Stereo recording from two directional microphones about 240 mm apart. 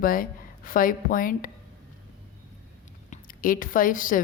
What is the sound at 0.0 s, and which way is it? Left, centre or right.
Speech, left.